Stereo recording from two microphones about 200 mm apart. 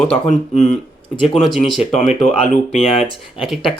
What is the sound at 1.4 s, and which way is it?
Speech, centre (ahead or behind).